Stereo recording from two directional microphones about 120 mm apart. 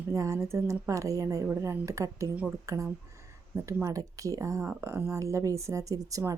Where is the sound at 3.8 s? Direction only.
30° right (ahead or behind).